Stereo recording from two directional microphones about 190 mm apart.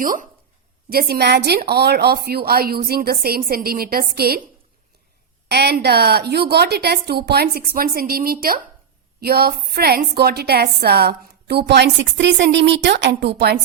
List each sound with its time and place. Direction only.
0.0 s a woman's voice: 45° right (ahead or behind)
5.5 s a woman's voice: 60° right (ahead or behind)